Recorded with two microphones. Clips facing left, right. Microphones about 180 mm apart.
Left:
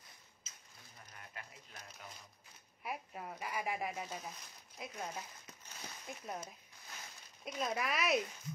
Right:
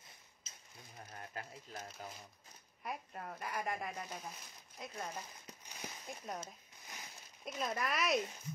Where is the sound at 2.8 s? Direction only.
5° left (ahead or behind).